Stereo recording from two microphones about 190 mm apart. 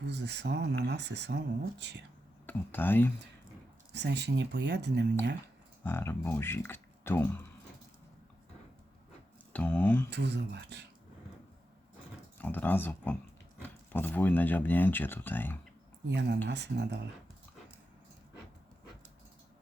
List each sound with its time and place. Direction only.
0.0 s speech: 65° right (ahead or behind)
2.5 s speech: 10° left (ahead or behind)
3.9 s speech: 65° right (ahead or behind)
5.8 s speech: 10° left (ahead or behind)
9.5 s speech: 5° left (ahead or behind)
10.1 s speech: 65° right (ahead or behind)
12.4 s speech: 10° left (ahead or behind)
16.0 s speech: 65° right (ahead or behind)